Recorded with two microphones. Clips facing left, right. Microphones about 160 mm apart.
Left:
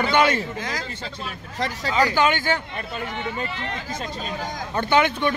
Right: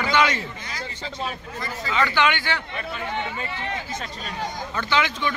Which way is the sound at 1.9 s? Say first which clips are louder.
Left 2 dB; 40° left (ahead or behind).